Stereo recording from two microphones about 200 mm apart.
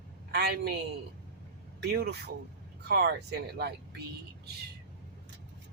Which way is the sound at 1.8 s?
55° right (ahead or behind).